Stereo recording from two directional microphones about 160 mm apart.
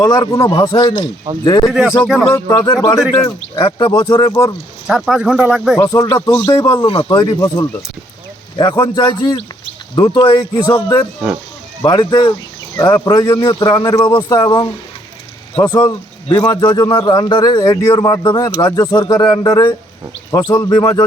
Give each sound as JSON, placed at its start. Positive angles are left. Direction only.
{"t": 0.0, "sound": "a man's voice", "side_deg": 25}
{"t": 4.9, "sound": "speech", "side_deg": 0}
{"t": 5.8, "sound": "a man's voice", "side_deg": 25}
{"t": 15.7, "sound": "a man's voice", "side_deg": 25}